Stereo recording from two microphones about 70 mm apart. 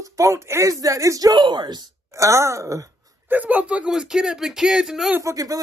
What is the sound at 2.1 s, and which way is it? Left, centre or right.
Speech, right.